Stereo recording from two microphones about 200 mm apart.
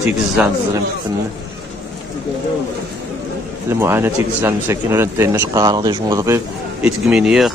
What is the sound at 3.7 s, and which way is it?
Speech, 10° right (ahead or behind).